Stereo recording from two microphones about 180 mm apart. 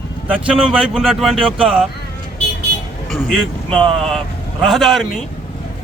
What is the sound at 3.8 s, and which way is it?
Speech, 30° right (ahead or behind).